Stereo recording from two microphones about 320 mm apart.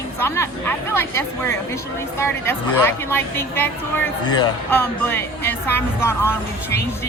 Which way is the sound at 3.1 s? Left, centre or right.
Centre.